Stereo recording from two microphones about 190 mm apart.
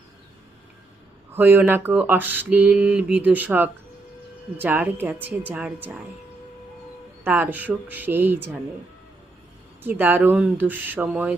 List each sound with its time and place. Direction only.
1.3 s mantra: 10° right (ahead or behind)
7.3 s mantra: 10° right (ahead or behind)
9.8 s mantra: 10° right (ahead or behind)